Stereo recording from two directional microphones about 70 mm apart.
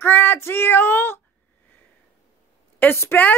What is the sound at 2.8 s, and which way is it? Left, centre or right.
Speech, left.